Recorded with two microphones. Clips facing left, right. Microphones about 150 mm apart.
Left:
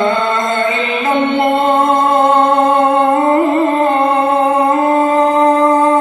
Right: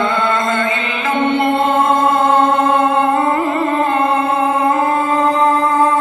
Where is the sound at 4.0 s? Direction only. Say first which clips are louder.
Left 3 dB; 20° left (ahead or behind).